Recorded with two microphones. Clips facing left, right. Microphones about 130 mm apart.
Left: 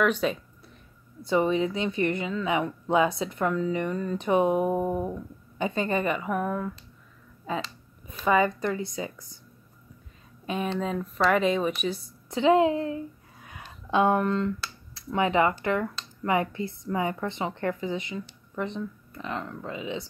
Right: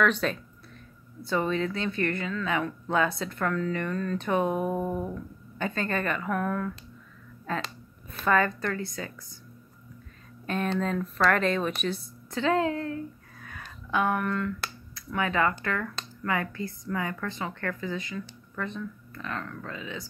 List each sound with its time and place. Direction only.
0.0 s a woman's voice: 10° left (ahead or behind)
7.5 s a sound: 10° left (ahead or behind)
8.1 s a woman's voice: 10° left (ahead or behind)
10.4 s a woman's voice: 10° left (ahead or behind)